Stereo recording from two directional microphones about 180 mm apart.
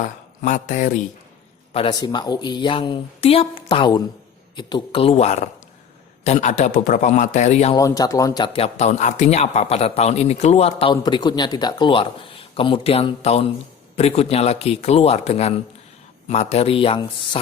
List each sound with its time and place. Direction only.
0.0 s speech: 45° left (ahead or behind)
1.7 s a woman's voice: 25° left (ahead or behind)
7.8 s speech: 20° left (ahead or behind)